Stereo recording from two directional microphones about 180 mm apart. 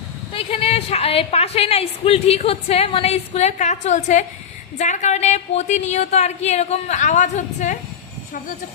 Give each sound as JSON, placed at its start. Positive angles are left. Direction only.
{"t": 0.3, "sound": "a woman's voice", "side_deg": 30}